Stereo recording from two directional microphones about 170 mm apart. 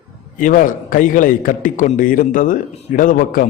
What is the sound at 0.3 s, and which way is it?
A man's voice, 50° left (ahead or behind).